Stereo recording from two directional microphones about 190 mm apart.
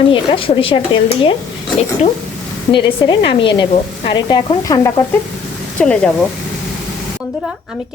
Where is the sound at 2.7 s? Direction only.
25° left (ahead or behind); by 6.1 s 5° left (ahead or behind).